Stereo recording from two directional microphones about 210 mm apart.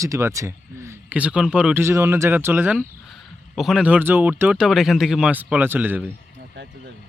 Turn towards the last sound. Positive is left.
turn(degrees=-10)  # may be behind; listen again after turning